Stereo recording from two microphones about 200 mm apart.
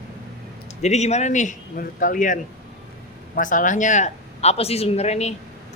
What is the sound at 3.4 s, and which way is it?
Speech, 40° left (ahead or behind).